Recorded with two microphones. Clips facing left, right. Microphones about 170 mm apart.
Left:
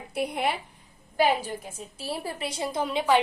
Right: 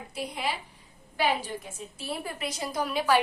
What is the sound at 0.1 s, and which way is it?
Speech, 60° left (ahead or behind).